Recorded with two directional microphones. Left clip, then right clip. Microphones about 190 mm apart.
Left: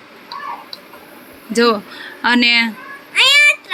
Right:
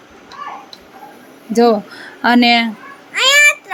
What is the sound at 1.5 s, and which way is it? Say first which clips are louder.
Speech: right 2 dB; 25° right (ahead or behind).